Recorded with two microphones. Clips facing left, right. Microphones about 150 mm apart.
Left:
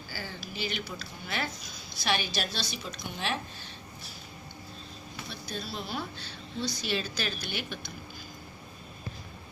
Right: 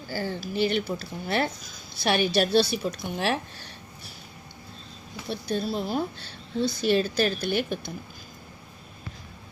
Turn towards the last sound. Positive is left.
turn(degrees=-50)  # may be behind; listen again after turning